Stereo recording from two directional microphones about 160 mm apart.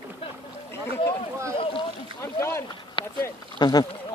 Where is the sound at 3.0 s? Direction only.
30° left (ahead or behind).